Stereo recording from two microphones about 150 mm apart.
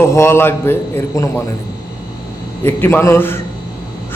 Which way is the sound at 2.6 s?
15° left (ahead or behind).